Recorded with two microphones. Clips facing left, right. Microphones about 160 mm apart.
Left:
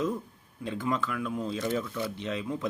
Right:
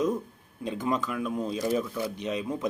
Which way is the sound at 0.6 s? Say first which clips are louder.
Right 2 dB; 20° right (ahead or behind).